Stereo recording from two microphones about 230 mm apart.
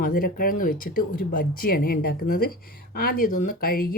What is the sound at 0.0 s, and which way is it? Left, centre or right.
Speech, left.